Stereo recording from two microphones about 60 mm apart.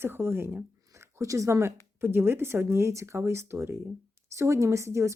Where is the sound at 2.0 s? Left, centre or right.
Right.